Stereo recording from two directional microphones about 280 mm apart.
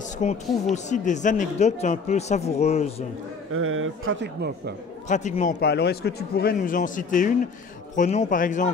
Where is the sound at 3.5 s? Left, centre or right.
Right.